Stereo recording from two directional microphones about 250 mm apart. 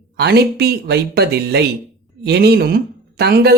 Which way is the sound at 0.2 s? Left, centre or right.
Right.